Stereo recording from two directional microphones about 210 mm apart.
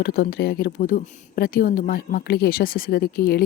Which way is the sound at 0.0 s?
45° left (ahead or behind).